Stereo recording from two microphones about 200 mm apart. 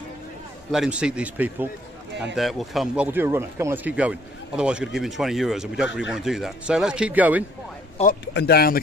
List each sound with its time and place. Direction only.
0.7 s a man's voice: 5° right (ahead or behind)
8.2 s speech: 60° left (ahead or behind)